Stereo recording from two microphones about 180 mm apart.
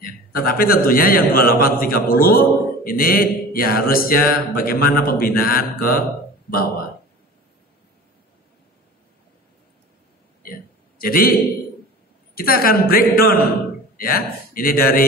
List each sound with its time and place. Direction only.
0.0 s a man's voice: 55° left (ahead or behind)
11.0 s a man's voice: 55° left (ahead or behind)
12.4 s a man's voice: 55° left (ahead or behind)